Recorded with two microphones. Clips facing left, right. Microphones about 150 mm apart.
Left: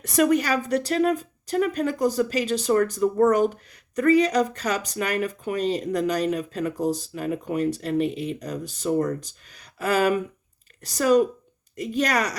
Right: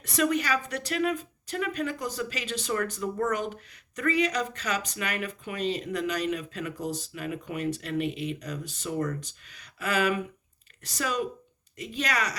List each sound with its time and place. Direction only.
0.0 s a woman's voice: 45° left (ahead or behind)